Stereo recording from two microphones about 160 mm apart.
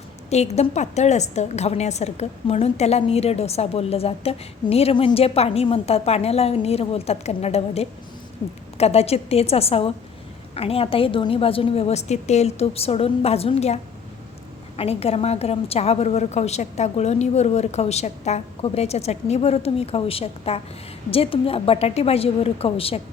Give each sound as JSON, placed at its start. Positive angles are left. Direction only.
{"t": 0.3, "sound": "a woman's voice", "side_deg": 45}
{"t": 14.8, "sound": "a woman's voice", "side_deg": 40}